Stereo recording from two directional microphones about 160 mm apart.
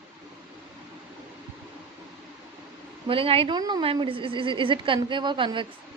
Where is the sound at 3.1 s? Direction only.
35° right (ahead or behind).